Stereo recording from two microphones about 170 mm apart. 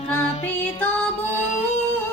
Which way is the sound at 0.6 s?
10° left (ahead or behind).